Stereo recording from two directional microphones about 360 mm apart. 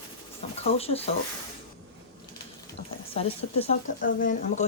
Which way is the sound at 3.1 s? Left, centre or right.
Centre.